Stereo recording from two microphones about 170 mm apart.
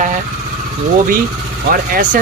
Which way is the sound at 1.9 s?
50° right (ahead or behind).